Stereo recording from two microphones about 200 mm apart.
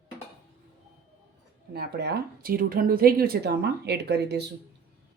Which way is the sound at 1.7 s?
50° right (ahead or behind).